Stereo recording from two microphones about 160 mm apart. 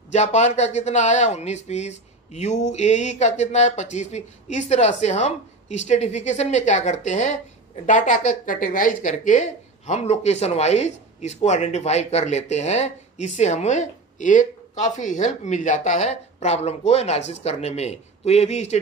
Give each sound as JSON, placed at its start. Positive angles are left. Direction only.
{"t": 0.1, "sound": "a woman's voice", "side_deg": 45}